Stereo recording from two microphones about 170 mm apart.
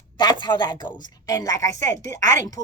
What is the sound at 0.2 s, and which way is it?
A woman's voice, 25° left (ahead or behind).